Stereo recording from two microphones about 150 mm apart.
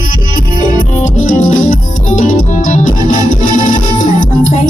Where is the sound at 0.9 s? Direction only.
55° left (ahead or behind).